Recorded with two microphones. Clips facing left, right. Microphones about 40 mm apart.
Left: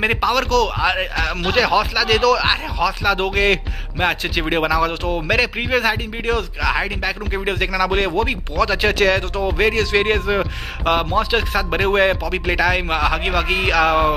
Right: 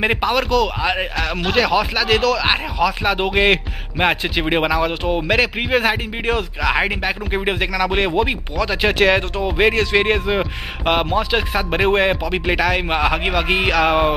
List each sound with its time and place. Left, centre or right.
0.0 s a man's voice: centre
3.1 s speech: centre